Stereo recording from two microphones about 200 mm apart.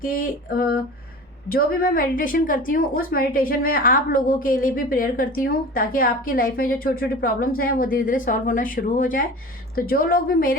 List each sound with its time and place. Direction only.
0.0 s a woman's voice: 45° left (ahead or behind)